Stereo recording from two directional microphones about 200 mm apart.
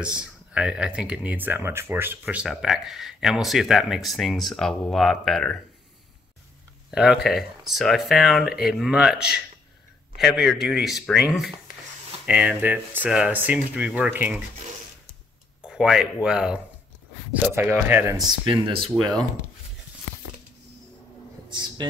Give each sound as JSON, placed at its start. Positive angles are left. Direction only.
{"t": 0.0, "sound": "speech", "side_deg": -5}
{"t": 6.9, "sound": "speech", "side_deg": -5}
{"t": 10.1, "sound": "speech", "side_deg": 0}
{"t": 12.3, "sound": "speech", "side_deg": -5}
{"t": 15.6, "sound": "speech", "side_deg": -5}
{"t": 18.8, "sound": "speech", "side_deg": 5}
{"t": 21.5, "sound": "a sound", "side_deg": -20}